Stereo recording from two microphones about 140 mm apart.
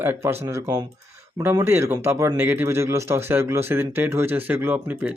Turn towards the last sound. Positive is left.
turn(degrees=-15)  # may be behind; listen again after turning